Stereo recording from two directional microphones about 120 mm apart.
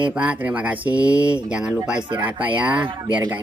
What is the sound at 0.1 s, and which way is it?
Speech, 10° right (ahead or behind).